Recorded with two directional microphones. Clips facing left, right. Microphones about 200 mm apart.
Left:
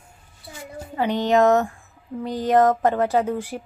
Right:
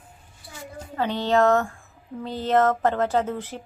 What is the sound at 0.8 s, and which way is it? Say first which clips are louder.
A woman's voice: left 3 dB; 15° left (ahead or behind).